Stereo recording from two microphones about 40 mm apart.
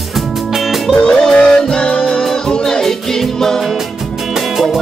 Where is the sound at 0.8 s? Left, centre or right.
Centre.